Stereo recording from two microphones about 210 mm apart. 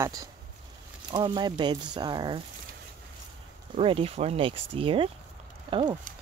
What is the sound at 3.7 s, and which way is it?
Speech, 25° right (ahead or behind).